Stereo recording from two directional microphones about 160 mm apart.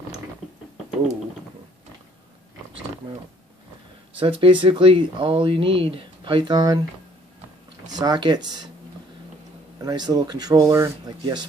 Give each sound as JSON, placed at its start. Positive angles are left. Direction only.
{"t": 4.2, "sound": "speech", "side_deg": -35}
{"t": 7.9, "sound": "speech", "side_deg": -25}
{"t": 9.8, "sound": "speech", "side_deg": -25}